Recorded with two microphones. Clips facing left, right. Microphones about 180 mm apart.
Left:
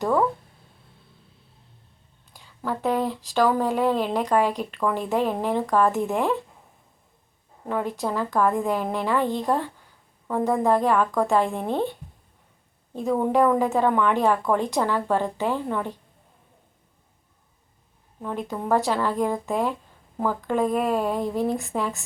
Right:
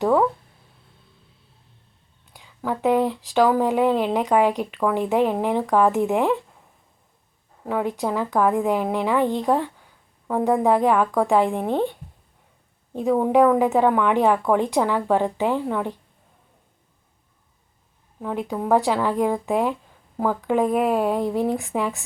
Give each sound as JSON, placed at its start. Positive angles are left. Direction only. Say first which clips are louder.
{"t": 0.0, "sound": "speech", "louder": "right 3 dB", "side_deg": -15}
{"t": 2.6, "sound": "speech", "louder": "right 4 dB", "side_deg": -15}
{"t": 7.7, "sound": "speech", "louder": "right 3 dB", "side_deg": -10}
{"t": 12.9, "sound": "speech", "louder": "right 3 dB", "side_deg": -15}
{"t": 18.2, "sound": "speech", "louder": "right 3 dB", "side_deg": -10}